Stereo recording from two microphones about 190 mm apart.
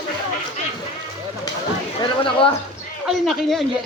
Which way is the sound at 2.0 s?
25° left (ahead or behind).